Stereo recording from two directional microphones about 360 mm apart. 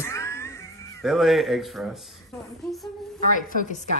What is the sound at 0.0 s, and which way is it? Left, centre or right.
Music, centre.